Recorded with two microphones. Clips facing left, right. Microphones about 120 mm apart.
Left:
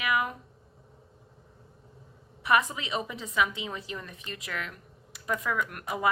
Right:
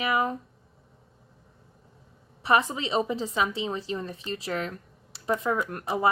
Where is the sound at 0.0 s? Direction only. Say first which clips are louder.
Right 3 dB; 30° right (ahead or behind).